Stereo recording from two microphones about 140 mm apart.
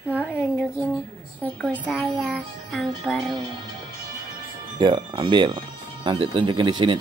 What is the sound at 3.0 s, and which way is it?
Speech, centre (ahead or behind).